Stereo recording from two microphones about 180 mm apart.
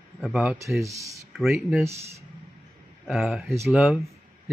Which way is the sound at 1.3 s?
Centre (ahead or behind).